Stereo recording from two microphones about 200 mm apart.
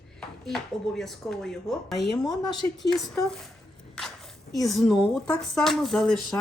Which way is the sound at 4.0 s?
Centre (ahead or behind).